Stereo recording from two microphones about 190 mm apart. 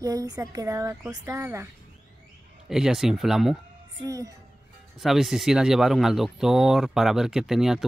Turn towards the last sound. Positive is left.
turn(degrees=0)  # may be behind; listen again after turning